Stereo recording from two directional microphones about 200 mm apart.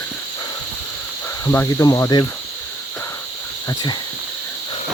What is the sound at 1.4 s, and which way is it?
Cricket, 15° left (ahead or behind).